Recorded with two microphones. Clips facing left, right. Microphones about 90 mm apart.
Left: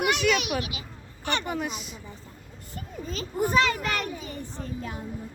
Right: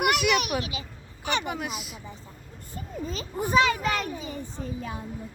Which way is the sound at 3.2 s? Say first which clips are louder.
Right 1 dB; 10° right (ahead or behind).